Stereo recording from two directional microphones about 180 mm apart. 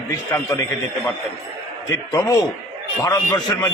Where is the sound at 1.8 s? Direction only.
20° left (ahead or behind).